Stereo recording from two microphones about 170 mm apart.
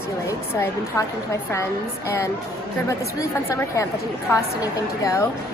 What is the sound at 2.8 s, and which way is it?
A woman's voice, 20° left (ahead or behind).